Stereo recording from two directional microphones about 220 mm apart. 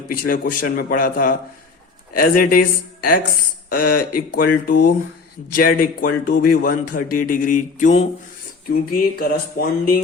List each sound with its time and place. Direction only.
0.1 s speech: 40° left (ahead or behind)